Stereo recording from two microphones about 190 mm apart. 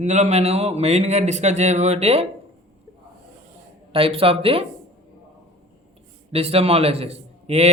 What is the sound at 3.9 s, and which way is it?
Speech, 30° right (ahead or behind).